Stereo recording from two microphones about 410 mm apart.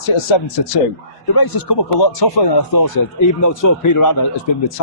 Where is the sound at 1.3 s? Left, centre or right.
Left.